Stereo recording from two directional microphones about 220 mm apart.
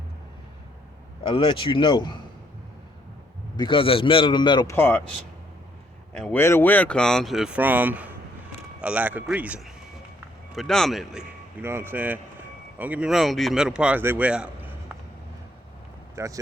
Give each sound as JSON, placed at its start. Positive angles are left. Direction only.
{"t": 1.2, "sound": "a man's voice", "side_deg": 25}
{"t": 3.6, "sound": "a man's voice", "side_deg": 25}
{"t": 6.1, "sound": "speech", "side_deg": 5}
{"t": 16.1, "sound": "speech", "side_deg": -15}